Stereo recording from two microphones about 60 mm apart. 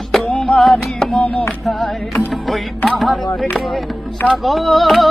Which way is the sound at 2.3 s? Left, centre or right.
Centre.